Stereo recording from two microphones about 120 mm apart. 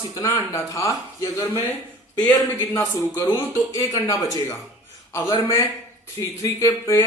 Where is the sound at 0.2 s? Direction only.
25° left (ahead or behind).